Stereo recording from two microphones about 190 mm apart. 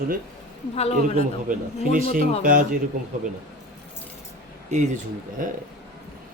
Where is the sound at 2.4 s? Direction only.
45° right (ahead or behind).